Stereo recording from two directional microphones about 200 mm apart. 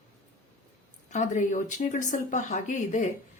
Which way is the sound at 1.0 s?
35° left (ahead or behind).